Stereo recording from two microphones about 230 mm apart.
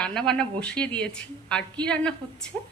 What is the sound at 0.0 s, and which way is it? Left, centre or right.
A woman's voice, centre.